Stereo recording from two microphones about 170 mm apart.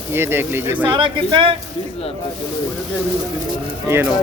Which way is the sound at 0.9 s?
30° right (ahead or behind).